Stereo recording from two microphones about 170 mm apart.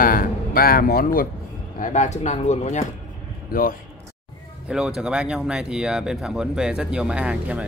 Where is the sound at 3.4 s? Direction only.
55° left (ahead or behind).